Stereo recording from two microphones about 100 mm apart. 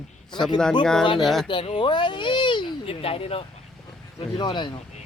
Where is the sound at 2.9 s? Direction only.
75° left (ahead or behind).